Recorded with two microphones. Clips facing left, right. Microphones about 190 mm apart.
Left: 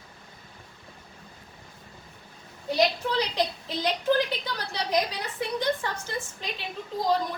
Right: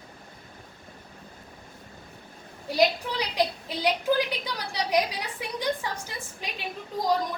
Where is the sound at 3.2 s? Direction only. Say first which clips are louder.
Right 2 dB; 10° right (ahead or behind).